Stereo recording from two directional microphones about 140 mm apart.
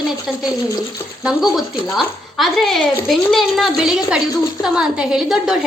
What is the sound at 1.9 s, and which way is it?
Speech, centre (ahead or behind).